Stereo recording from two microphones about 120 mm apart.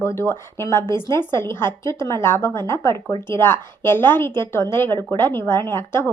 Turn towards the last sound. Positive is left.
turn(degrees=20)  # may be behind; listen again after turning